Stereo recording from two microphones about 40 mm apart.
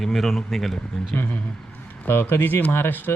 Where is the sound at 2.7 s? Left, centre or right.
Left.